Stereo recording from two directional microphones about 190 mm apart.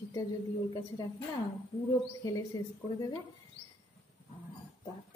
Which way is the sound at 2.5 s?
20° left (ahead or behind).